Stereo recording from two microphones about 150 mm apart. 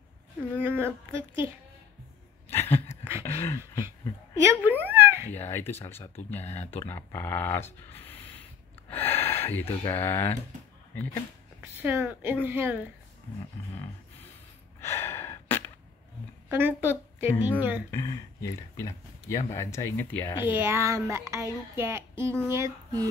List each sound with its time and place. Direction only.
0.6 s speech: 15° right (ahead or behind)
2.5 s a sound: 15° left (ahead or behind)
4.6 s a sound: 10° right (ahead or behind)
5.3 s speech: 15° left (ahead or behind)
8.9 s gasp: 15° left (ahead or behind)
9.8 s speech: 15° left (ahead or behind)
11.8 s speech: 15° right (ahead or behind)
14.8 s gasp: 15° left (ahead or behind)
16.4 s speech: 15° right (ahead or behind)
17.9 s speech: 20° left (ahead or behind)
20.4 s speech: 15° right (ahead or behind)